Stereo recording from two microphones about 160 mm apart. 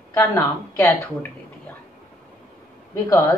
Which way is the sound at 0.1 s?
15° left (ahead or behind).